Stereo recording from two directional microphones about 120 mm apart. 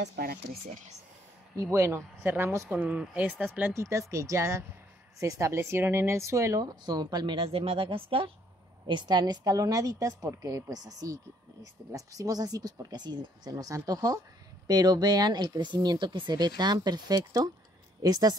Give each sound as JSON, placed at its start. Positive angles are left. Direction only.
{"t": 1.6, "sound": "a woman's voice", "side_deg": -25}
{"t": 8.8, "sound": "a woman's voice", "side_deg": -40}